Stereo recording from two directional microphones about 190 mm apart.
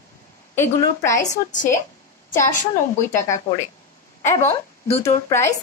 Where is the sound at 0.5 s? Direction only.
15° left (ahead or behind).